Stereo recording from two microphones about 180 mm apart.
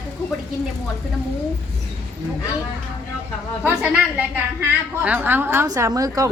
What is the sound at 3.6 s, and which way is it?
A woman's voice, 5° right (ahead or behind).